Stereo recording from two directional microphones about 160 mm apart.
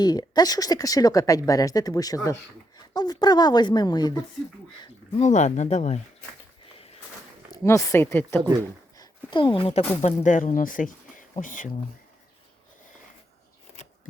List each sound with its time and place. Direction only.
0.0 s speech: 25° left (ahead or behind)
5.1 s speech: 45° left (ahead or behind)
7.5 s speech: 15° left (ahead or behind)
9.0 s a sound: 30° left (ahead or behind)
10.0 s speech: 50° left (ahead or behind)